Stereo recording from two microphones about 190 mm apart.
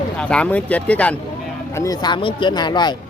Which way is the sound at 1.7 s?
20° left (ahead or behind).